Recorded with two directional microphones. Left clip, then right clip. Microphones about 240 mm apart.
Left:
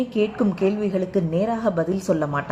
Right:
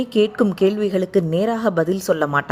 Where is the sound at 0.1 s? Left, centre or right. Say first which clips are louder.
Right 5 dB; right.